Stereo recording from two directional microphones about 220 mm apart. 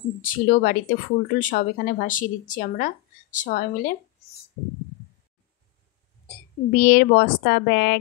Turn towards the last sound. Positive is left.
turn(degrees=45)  # may be behind; listen again after turning